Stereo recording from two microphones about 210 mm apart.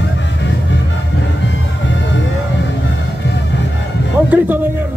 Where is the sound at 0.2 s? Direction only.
60° left (ahead or behind).